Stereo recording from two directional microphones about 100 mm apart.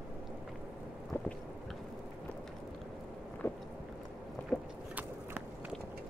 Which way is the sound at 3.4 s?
20° left (ahead or behind).